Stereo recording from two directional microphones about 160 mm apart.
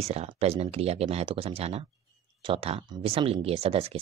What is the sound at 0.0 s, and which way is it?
Speech, 40° right (ahead or behind).